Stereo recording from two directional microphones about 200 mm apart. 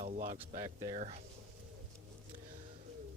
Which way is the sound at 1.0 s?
30° right (ahead or behind).